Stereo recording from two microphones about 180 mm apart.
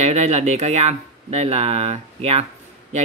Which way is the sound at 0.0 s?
40° right (ahead or behind).